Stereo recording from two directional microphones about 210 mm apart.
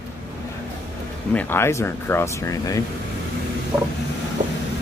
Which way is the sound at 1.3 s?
10° left (ahead or behind).